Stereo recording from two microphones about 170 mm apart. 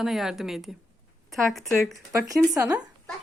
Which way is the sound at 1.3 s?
Centre (ahead or behind).